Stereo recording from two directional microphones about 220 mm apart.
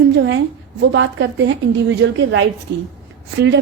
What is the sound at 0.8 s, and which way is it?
A woman's voice, 55° right (ahead or behind).